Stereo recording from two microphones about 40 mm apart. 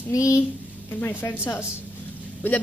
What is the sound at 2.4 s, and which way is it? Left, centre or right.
Speech, left.